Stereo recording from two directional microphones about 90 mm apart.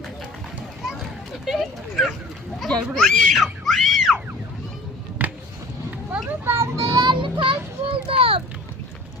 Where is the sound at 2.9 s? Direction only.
5° left (ahead or behind).